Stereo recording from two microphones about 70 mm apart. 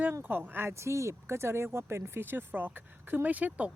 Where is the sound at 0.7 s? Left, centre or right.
Right.